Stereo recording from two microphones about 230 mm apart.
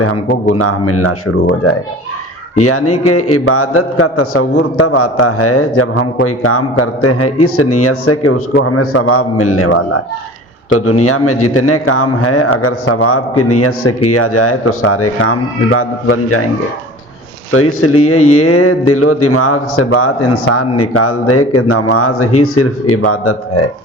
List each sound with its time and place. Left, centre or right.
0.5 s a man's voice: left
2.6 s a man's voice: left
4.5 s a man's voice: left
17.5 s a man's voice: left